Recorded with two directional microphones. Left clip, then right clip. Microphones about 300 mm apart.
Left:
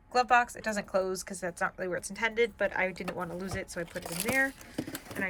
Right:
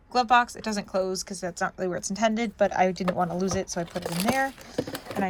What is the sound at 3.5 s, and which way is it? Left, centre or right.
Speech, centre.